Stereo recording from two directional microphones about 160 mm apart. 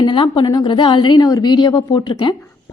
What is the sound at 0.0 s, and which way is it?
A woman's voice, 30° left (ahead or behind).